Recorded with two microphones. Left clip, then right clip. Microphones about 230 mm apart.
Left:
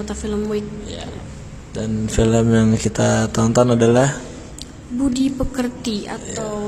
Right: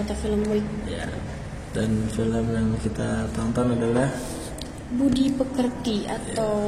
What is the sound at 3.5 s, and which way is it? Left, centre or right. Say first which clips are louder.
Speech: left 10 dB; left.